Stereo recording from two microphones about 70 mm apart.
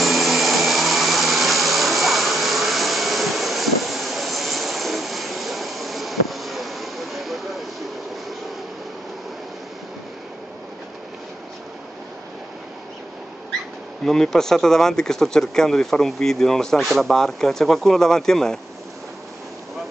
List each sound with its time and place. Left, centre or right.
0.0 s vacuum cleaner: centre
14.0 s speech: centre